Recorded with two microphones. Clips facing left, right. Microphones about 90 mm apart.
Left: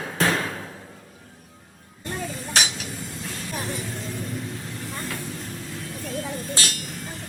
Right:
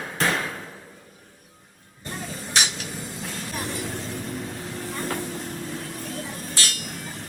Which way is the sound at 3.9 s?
45° right (ahead or behind).